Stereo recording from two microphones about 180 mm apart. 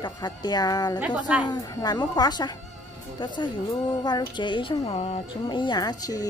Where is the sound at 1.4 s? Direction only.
20° left (ahead or behind).